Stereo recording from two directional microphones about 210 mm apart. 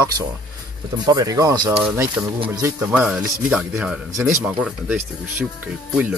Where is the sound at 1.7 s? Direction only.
5° right (ahead or behind).